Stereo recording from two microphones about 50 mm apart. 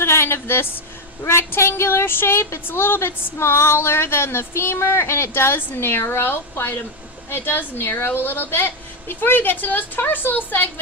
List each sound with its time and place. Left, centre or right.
0.0 s speech: left
1.2 s a woman's voice: left